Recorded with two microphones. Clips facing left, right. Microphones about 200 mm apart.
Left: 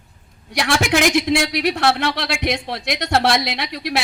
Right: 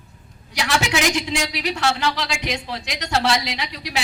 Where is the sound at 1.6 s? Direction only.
60° left (ahead or behind).